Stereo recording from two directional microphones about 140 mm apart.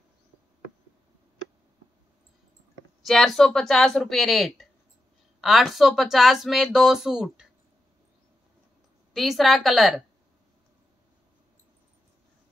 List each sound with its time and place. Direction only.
3.1 s speech: centre (ahead or behind)
9.1 s speech: centre (ahead or behind)